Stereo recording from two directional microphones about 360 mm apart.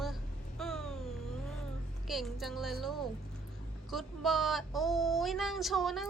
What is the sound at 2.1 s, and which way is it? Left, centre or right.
Speech, centre.